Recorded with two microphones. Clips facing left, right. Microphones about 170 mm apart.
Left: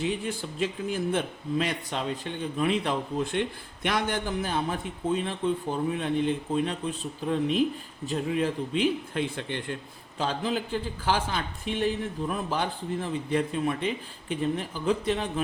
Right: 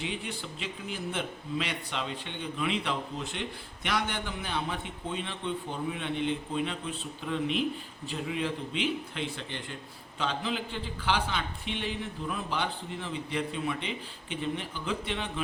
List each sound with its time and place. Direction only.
0.0 s a man's voice: 45° left (ahead or behind)
10.2 s a man's voice: 40° left (ahead or behind)